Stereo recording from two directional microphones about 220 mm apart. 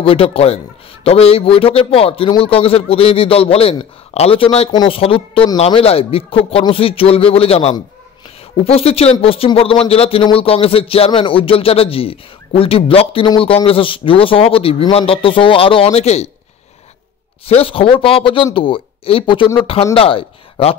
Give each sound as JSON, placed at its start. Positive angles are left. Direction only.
{"t": 0.0, "sound": "speech", "side_deg": 25}
{"t": 17.5, "sound": "speech", "side_deg": 25}